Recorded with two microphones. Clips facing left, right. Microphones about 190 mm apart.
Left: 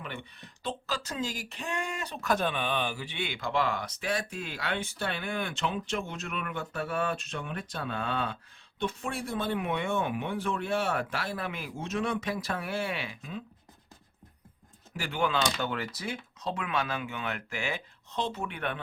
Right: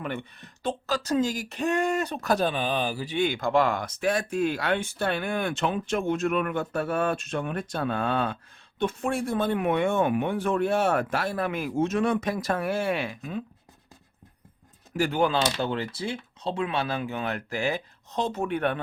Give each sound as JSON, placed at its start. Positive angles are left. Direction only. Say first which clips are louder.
{"t": 0.0, "sound": "speech", "louder": "right 8 dB", "side_deg": -50}
{"t": 14.9, "sound": "speech", "louder": "right 6 dB", "side_deg": -40}